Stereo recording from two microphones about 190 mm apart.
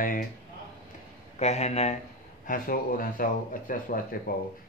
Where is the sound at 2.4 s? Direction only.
45° left (ahead or behind).